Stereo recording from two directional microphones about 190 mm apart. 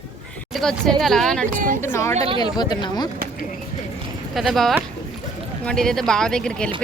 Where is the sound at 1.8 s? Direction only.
15° left (ahead or behind).